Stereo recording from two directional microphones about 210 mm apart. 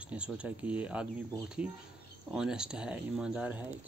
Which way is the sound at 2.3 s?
5° right (ahead or behind).